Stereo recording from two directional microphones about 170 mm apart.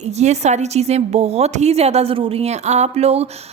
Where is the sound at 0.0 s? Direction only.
40° right (ahead or behind).